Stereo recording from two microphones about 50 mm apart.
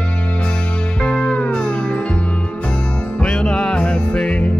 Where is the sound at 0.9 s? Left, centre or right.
Centre.